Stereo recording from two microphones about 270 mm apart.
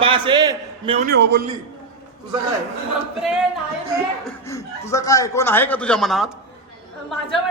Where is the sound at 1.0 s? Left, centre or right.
Right.